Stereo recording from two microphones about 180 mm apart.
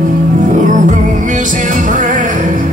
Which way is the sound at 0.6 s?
45° right (ahead or behind).